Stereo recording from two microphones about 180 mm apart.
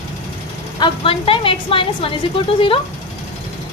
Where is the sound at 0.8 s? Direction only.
30° left (ahead or behind).